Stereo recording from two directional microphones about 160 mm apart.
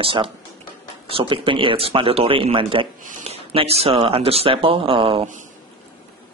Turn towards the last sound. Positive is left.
turn(degrees=-35)  # may be behind; listen again after turning